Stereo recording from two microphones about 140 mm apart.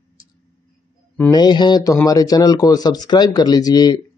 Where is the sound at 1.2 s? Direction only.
30° left (ahead or behind).